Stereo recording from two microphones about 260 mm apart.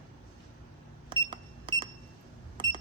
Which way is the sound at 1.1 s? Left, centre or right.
Centre.